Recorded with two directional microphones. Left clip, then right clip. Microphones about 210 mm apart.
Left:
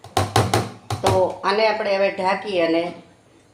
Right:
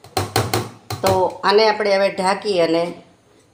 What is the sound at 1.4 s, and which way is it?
Speech, 40° right (ahead or behind).